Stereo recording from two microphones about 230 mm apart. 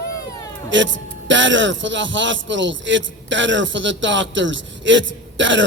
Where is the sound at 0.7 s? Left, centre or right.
Right.